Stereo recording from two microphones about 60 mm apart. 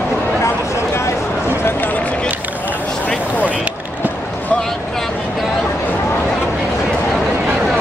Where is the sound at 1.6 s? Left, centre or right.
Left.